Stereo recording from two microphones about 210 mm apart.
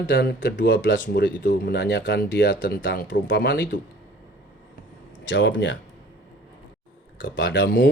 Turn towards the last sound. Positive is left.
turn(degrees=60)  # may be behind; listen again after turning